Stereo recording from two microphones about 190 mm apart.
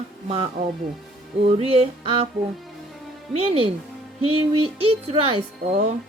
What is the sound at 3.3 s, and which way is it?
A woman's voice, 30° right (ahead or behind).